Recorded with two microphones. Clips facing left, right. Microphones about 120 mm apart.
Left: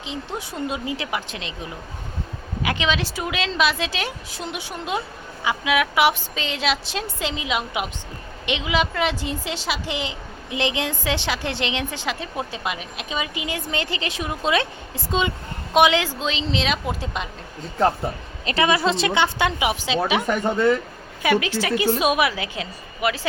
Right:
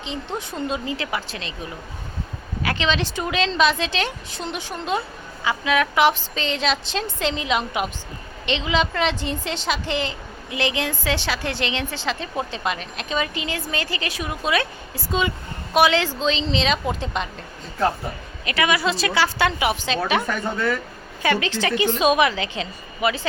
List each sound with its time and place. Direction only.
0.3 s a woman's voice: 15° left (ahead or behind)
2.6 s a woman's voice: 10° left (ahead or behind)
18.4 s a woman's voice: 30° left (ahead or behind)
21.2 s a woman's voice: 5° left (ahead or behind)